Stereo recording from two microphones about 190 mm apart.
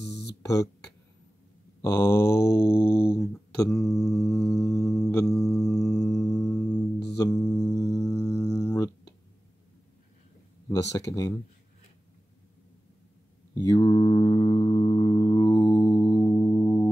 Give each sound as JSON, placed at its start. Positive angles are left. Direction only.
{"t": 0.1, "sound": "a sound", "side_deg": 60}
{"t": 0.4, "sound": "a sound", "side_deg": 15}
{"t": 1.8, "sound": "mantra", "side_deg": 15}
{"t": 5.6, "sound": "music", "side_deg": 15}
{"t": 7.2, "sound": "mantra", "side_deg": 20}
{"t": 10.7, "sound": "speech", "side_deg": 20}
{"t": 13.6, "sound": "mantra", "side_deg": 20}